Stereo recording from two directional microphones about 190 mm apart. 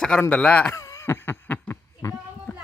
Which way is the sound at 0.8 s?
15° left (ahead or behind).